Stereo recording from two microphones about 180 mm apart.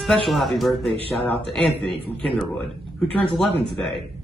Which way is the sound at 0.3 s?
Centre (ahead or behind).